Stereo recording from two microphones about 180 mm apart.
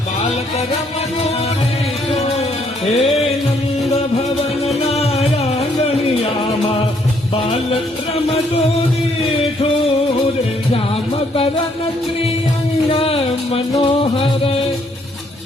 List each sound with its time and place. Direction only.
2.1 s music: 35° left (ahead or behind)
4.6 s music: 35° left (ahead or behind)
12.9 s music: 30° left (ahead or behind)